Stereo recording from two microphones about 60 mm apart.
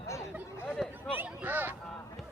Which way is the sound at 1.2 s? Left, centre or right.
Right.